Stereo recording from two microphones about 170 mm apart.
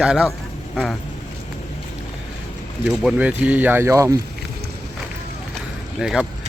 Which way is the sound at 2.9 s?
5° right (ahead or behind).